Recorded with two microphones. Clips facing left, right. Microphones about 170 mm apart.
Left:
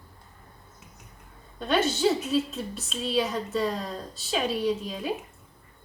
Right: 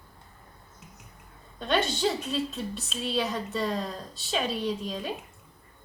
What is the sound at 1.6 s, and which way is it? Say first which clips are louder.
A woman's voice: left 3 dB; centre (ahead or behind).